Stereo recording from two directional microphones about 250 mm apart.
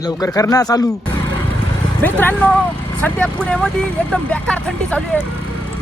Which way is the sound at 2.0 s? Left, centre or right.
Centre.